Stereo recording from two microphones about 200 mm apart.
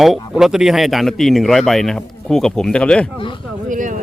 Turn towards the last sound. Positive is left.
turn(degrees=-40)  # may be behind; listen again after turning